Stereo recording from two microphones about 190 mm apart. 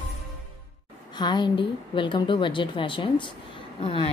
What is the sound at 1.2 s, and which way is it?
A woman's voice, 25° left (ahead or behind).